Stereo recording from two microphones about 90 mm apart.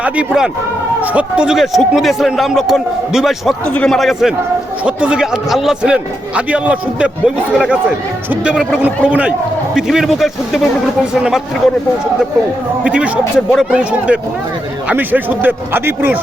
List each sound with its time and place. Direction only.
0.0 s a man's voice: 10° right (ahead or behind)
8.3 s a man's voice: 10° right (ahead or behind)
9.7 s a man's voice: 5° right (ahead or behind)
12.8 s a man's voice: 10° right (ahead or behind)